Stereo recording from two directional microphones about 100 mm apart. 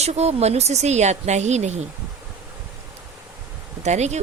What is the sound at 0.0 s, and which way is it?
Speech, 90° right.